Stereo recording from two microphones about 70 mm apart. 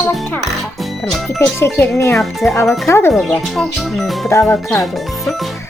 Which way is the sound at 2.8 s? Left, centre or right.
Left.